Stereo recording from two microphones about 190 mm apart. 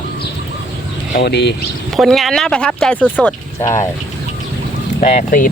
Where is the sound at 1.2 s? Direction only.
60° left (ahead or behind).